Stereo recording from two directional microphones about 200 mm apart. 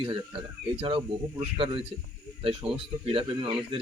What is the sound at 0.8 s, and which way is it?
Speech, 30° right (ahead or behind).